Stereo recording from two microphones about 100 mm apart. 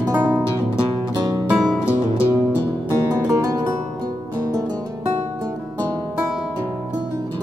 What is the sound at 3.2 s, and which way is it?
Music, 35° right (ahead or behind).